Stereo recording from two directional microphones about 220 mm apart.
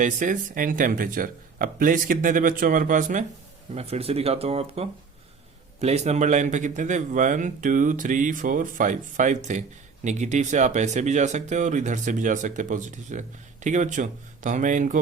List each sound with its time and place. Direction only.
0.0 s speech: 35° right (ahead or behind)